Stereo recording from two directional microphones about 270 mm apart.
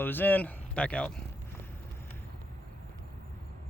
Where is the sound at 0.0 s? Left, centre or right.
Centre.